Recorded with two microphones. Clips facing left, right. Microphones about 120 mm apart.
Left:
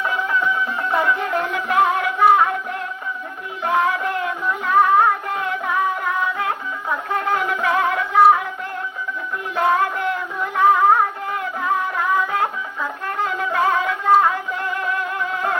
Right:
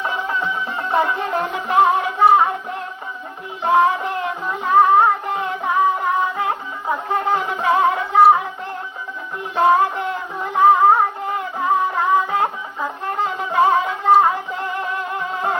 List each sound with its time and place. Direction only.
0.0 s music: 30° right (ahead or behind)
3.6 s music: 30° right (ahead or behind)
9.6 s music: 25° right (ahead or behind)